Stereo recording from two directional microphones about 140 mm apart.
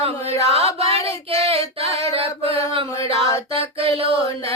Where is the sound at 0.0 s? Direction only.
45° right (ahead or behind).